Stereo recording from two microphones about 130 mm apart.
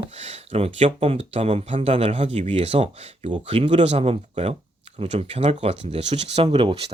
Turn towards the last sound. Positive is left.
turn(degrees=-45)  # may be behind; listen again after turning